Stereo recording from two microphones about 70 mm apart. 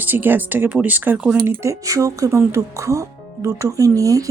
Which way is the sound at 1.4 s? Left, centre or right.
Right.